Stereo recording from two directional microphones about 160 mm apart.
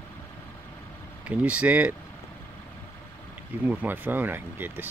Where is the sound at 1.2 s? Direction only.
5° right (ahead or behind).